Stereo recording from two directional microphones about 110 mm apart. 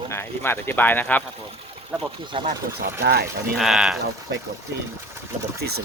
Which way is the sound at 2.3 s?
50° right (ahead or behind).